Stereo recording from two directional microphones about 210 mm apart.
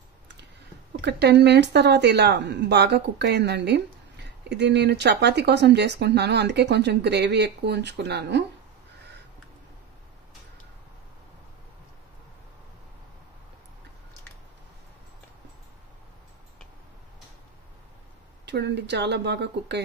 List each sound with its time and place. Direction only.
1.0 s speech: 55° right (ahead or behind)
18.4 s speech: 55° right (ahead or behind)